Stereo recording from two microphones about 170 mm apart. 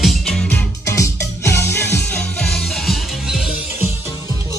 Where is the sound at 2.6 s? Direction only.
Centre (ahead or behind).